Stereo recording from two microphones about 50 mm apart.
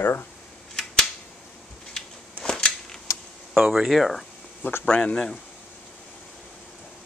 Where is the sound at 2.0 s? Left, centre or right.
Centre.